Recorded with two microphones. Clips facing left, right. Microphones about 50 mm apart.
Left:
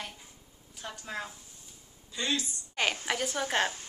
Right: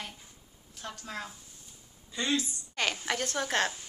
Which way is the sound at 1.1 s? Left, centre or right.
Centre.